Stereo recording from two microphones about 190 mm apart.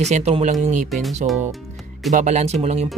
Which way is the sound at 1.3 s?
10° right (ahead or behind).